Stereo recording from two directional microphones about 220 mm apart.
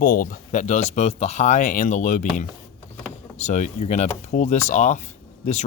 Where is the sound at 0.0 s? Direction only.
40° left (ahead or behind).